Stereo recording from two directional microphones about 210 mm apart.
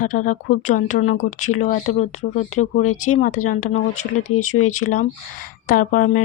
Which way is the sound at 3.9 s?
90° left.